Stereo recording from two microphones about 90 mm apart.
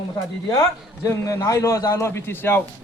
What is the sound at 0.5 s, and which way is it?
A man's voice, 40° left (ahead or behind).